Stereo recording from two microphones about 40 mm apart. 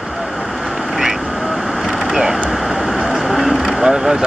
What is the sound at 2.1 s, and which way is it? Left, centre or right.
Speech, centre.